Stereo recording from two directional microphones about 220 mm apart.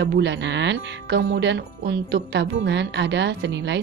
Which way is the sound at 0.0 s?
50° right (ahead or behind).